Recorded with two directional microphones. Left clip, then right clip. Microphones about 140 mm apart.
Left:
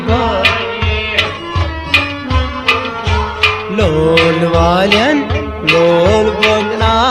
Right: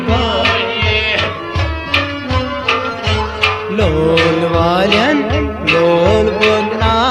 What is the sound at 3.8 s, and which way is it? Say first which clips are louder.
Music: left 2 dB; 25° left (ahead or behind).